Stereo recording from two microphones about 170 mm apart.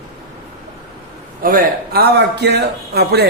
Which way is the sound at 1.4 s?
55° right (ahead or behind).